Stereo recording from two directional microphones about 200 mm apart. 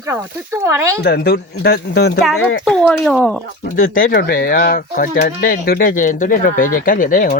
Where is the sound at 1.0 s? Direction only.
55° left (ahead or behind).